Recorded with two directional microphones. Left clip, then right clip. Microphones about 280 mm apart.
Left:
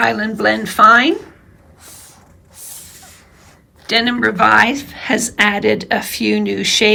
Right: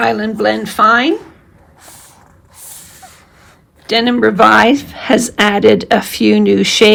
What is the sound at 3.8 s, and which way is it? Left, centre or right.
Speech, centre.